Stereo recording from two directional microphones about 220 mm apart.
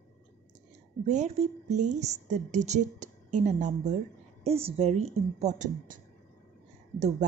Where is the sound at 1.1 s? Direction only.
30° right (ahead or behind).